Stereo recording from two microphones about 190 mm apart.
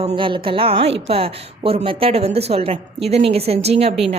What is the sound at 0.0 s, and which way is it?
A woman's voice, 30° right (ahead or behind).